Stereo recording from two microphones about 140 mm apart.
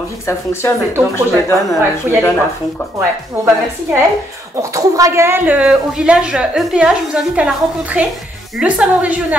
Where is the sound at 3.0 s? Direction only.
20° right (ahead or behind).